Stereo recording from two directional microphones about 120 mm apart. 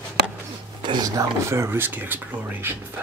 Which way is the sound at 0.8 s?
40° right (ahead or behind).